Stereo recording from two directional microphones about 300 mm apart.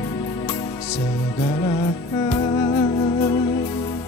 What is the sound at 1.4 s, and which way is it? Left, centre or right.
Music, centre.